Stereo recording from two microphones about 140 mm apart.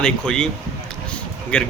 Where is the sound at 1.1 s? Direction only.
5° left (ahead or behind).